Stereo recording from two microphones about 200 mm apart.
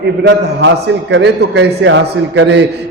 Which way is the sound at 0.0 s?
60° right (ahead or behind).